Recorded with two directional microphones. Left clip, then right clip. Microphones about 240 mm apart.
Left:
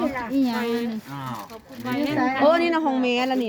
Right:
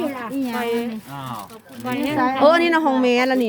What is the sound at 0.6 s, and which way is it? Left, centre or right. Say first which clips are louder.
Speech: right 3 dB; right.